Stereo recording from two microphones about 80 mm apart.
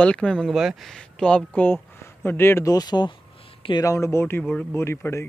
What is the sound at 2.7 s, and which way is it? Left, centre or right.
Speech, left.